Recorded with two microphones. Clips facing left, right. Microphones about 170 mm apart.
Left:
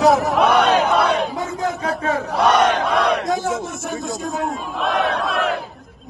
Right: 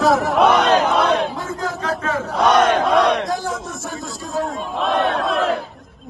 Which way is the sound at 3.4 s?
25° left (ahead or behind).